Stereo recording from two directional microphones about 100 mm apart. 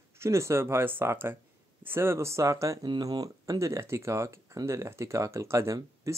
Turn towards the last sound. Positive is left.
turn(degrees=-30)  # may be behind; listen again after turning